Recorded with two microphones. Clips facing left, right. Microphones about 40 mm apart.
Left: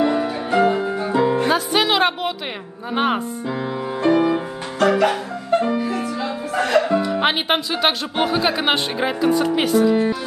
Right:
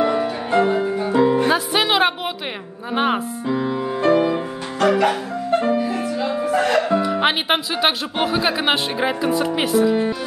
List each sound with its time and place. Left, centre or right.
0.0 s music: centre
6.5 s speech: centre